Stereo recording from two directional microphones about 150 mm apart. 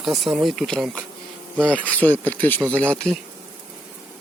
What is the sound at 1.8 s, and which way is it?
Speech, 10° left (ahead or behind).